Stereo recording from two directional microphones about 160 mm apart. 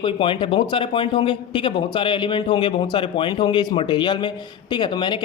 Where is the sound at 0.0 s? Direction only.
30° left (ahead or behind).